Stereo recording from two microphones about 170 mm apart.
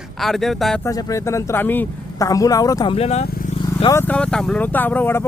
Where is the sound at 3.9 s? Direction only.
10° left (ahead or behind).